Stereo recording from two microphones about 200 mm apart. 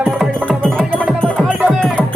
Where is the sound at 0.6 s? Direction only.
5° left (ahead or behind).